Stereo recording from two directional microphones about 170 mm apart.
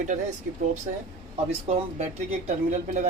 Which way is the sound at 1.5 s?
40° right (ahead or behind).